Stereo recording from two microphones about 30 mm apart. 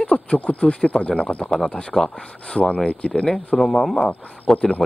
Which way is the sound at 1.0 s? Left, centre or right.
Left.